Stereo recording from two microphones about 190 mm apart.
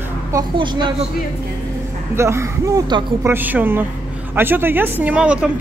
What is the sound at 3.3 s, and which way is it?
Speech, 10° right (ahead or behind).